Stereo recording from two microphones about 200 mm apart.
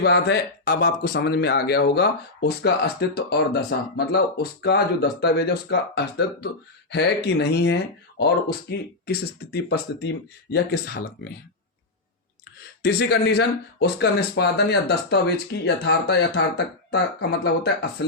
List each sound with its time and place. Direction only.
0.0 s speech: 55° left (ahead or behind)
12.8 s speech: 55° left (ahead or behind)